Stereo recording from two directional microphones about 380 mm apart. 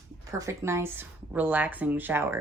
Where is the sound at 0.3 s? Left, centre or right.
Centre.